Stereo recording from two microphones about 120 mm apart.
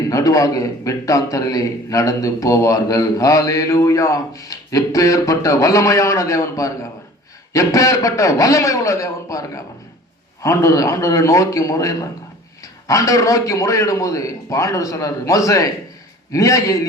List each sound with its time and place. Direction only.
0.1 s a man's voice: 30° left (ahead or behind)